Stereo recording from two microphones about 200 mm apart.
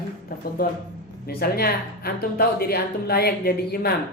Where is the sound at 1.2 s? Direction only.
50° left (ahead or behind).